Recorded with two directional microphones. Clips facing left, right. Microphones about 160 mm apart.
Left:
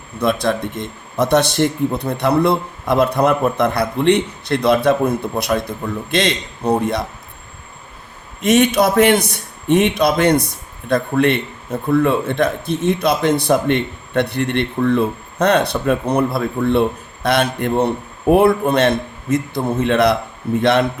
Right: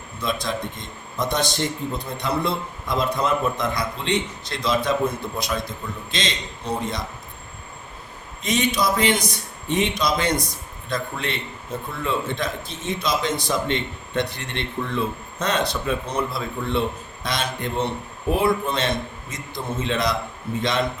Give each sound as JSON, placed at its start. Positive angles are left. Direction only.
{"t": 0.2, "sound": "a man's voice", "side_deg": 65}
{"t": 8.4, "sound": "a man's voice", "side_deg": 65}